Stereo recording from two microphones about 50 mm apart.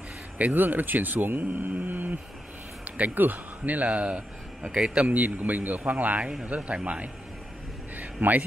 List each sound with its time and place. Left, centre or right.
0.4 s a man's voice: right; by 5.1 s centre
5.1 s speech: right
8.0 s a sound: right